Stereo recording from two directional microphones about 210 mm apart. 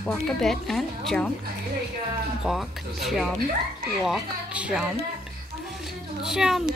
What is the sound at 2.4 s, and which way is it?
A woman's voice, centre (ahead or behind).